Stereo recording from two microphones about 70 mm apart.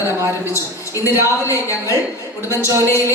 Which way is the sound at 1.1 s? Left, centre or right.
Left.